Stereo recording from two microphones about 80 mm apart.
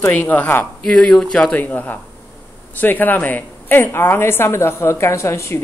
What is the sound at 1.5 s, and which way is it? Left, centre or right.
A woman's voice, left.